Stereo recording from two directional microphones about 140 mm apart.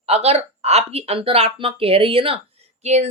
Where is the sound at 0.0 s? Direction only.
45° right (ahead or behind).